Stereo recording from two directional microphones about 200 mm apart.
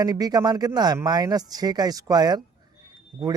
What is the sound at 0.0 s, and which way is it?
Speech, 20° right (ahead or behind).